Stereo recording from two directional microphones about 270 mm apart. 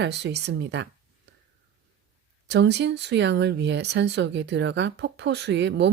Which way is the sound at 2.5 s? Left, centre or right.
Right.